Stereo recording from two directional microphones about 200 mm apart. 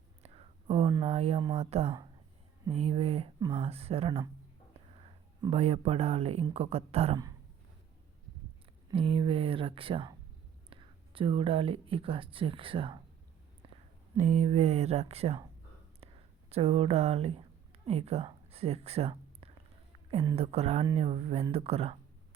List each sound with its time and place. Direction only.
0.7 s a sound: 30° right (ahead or behind)
1.0 s speech: 35° right (ahead or behind)
1.4 s speech: 20° right (ahead or behind)
2.7 s speech: 30° right (ahead or behind)
8.9 s speech: 25° right (ahead or behind)
14.2 s speech: 35° right (ahead or behind)
16.5 s speech: 30° right (ahead or behind)